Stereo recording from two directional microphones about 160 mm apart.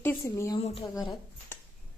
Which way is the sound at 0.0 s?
15° left (ahead or behind).